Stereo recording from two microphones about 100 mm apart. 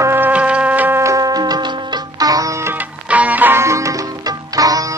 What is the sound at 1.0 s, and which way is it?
Music, 35° right (ahead or behind).